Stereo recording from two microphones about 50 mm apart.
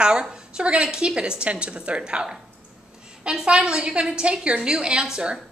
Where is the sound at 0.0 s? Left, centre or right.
Centre.